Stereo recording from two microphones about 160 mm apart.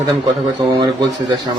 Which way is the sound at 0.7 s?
30° right (ahead or behind).